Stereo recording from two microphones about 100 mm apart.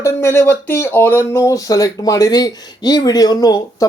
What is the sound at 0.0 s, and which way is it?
Speech, 25° left (ahead or behind).